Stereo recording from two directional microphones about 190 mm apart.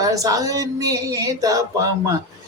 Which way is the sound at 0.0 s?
20° right (ahead or behind).